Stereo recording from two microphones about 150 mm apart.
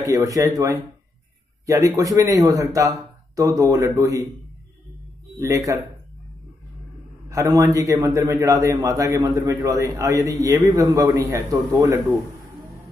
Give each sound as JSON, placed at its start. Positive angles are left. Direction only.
{"t": 0.0, "sound": "a man's voice", "side_deg": -25}
{"t": 5.4, "sound": "a man's voice", "side_deg": -20}
{"t": 7.2, "sound": "a man's voice", "side_deg": -20}